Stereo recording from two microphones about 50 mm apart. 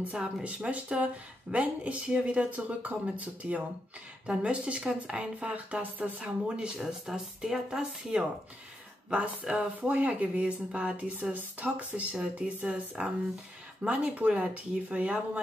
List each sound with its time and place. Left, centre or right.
0.1 s speech: right
6.8 s speech: centre
9.1 s speech: right